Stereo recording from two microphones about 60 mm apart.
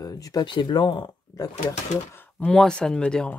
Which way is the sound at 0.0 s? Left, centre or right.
Left.